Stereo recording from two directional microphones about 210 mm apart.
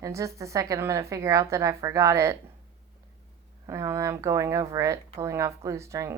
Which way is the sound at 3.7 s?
15° right (ahead or behind).